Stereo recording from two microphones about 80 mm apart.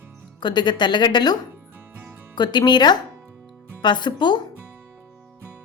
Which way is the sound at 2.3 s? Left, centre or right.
Left.